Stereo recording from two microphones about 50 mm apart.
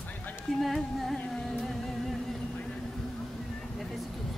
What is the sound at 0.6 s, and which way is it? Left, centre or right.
Speech, centre.